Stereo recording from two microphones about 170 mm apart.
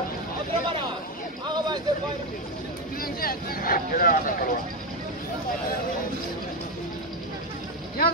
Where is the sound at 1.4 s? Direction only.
25° right (ahead or behind).